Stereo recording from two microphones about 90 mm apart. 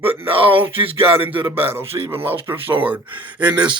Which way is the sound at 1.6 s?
25° right (ahead or behind).